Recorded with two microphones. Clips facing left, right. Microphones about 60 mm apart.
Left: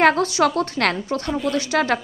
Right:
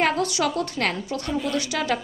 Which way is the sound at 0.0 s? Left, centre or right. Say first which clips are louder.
Left 6 dB; left.